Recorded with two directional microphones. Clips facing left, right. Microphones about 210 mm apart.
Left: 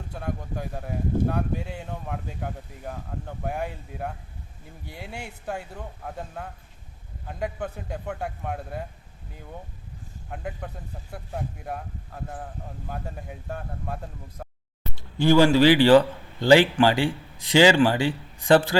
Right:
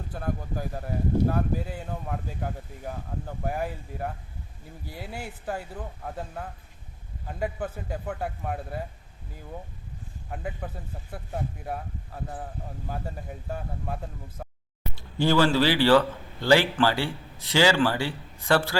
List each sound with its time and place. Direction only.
0.1 s speech: centre (ahead or behind)
10.2 s speech: centre (ahead or behind)
15.3 s a man's voice: 15° left (ahead or behind)